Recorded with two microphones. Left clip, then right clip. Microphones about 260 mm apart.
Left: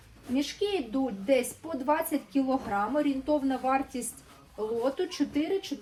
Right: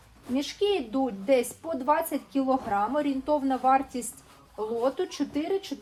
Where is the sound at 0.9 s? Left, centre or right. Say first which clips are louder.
Right 2 dB; right.